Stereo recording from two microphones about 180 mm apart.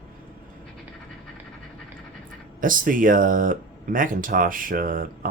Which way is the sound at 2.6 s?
50° right (ahead or behind).